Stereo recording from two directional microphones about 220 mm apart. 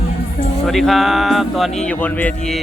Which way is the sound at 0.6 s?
Centre (ahead or behind).